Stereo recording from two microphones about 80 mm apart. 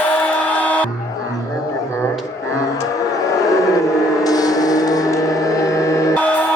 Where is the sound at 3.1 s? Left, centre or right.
Left.